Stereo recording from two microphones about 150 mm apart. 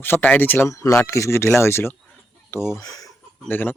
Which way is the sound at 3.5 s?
15° left (ahead or behind).